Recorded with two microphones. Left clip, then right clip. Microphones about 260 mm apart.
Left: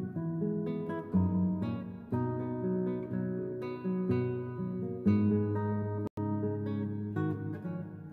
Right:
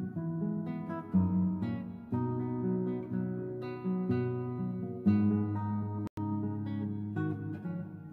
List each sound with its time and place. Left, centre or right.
0.7 s guitar: left
2.1 s music: left